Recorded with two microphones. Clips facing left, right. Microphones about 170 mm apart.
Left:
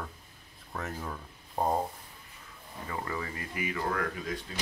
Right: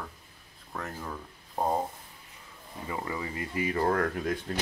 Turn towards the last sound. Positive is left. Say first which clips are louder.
# right 5 dB
turn(degrees=-55)  # may be behind; listen again after turning